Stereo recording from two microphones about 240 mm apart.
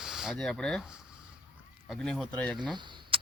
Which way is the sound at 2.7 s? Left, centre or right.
Centre.